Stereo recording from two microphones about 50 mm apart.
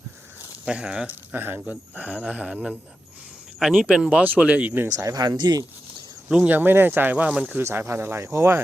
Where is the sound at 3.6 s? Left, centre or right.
Centre.